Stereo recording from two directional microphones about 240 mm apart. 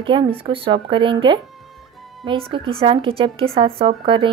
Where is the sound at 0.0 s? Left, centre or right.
Right.